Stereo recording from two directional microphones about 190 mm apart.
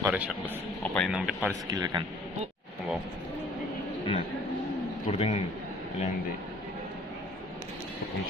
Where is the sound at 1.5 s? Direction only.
20° right (ahead or behind).